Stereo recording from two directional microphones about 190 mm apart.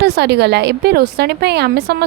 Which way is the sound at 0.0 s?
60° right (ahead or behind).